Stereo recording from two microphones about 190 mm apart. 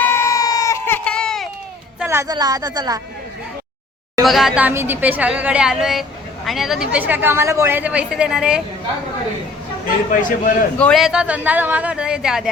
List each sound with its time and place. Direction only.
0.0 s a sound: 10° left (ahead or behind)
2.0 s speech: 15° right (ahead or behind)
4.2 s a woman's voice: centre (ahead or behind)
10.1 s a man's voice: 45° left (ahead or behind)
10.8 s speech: 5° left (ahead or behind)